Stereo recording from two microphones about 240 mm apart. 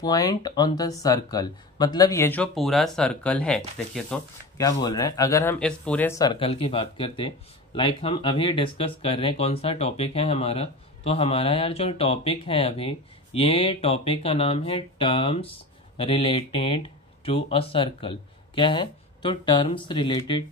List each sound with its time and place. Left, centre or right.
0.0 s speech: centre
4.6 s speech: centre